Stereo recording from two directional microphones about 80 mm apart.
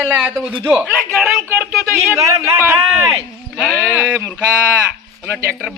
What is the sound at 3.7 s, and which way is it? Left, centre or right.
Speech, centre.